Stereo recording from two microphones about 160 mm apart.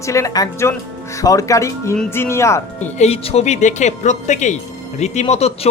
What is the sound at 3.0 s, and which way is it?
Speech, 40° left (ahead or behind).